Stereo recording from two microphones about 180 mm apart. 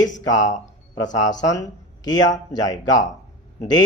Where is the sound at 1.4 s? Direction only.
20° left (ahead or behind).